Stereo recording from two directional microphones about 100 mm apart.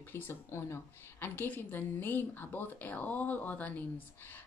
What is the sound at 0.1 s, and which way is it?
A woman's voice, 25° left (ahead or behind).